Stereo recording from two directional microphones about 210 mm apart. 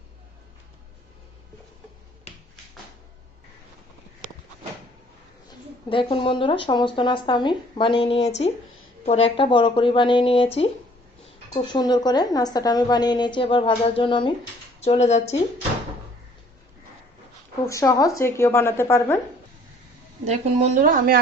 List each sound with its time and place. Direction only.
5.5 s speech: 25° left (ahead or behind)
17.7 s speech: 15° left (ahead or behind)
20.2 s speech: 30° right (ahead or behind)